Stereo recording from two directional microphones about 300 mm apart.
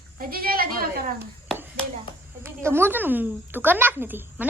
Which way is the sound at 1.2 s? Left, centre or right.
Centre.